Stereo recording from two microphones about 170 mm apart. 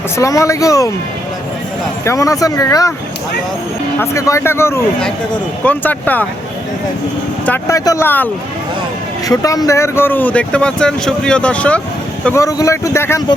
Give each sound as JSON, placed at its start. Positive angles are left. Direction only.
{"t": 0.2, "sound": "speech", "side_deg": 20}
{"t": 2.0, "sound": "speech", "side_deg": 20}
{"t": 4.0, "sound": "speech", "side_deg": 15}
{"t": 7.4, "sound": "speech", "side_deg": 10}